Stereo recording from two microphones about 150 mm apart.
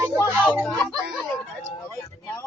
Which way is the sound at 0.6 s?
10° left (ahead or behind).